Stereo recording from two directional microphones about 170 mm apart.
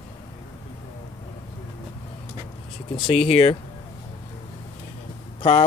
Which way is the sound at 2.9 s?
35° left (ahead or behind).